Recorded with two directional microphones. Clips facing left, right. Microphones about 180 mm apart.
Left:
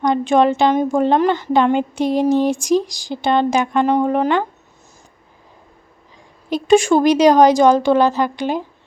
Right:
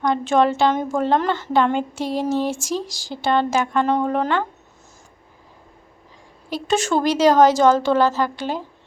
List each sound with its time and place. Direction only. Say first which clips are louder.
0.0 s a woman's voice: left 3 dB; 15° left (ahead or behind)
6.5 s a woman's voice: left 8 dB; 15° left (ahead or behind)